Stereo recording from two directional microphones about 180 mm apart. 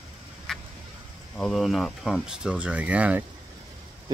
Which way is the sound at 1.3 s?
Centre (ahead or behind).